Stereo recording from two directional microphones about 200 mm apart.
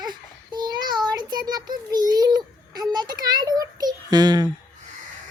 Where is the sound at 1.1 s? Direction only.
20° right (ahead or behind).